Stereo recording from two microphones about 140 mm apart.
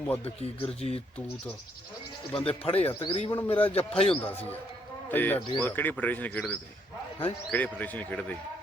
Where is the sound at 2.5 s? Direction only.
45° left (ahead or behind).